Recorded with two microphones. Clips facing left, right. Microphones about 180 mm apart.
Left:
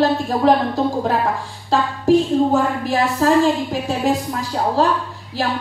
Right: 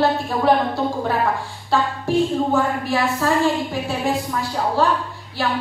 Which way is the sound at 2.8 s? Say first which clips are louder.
Left 3 dB; 40° left (ahead or behind).